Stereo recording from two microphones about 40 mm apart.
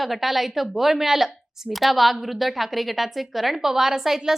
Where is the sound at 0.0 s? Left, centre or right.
Centre.